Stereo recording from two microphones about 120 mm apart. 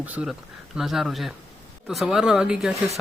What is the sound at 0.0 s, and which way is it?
Speech, 10° right (ahead or behind).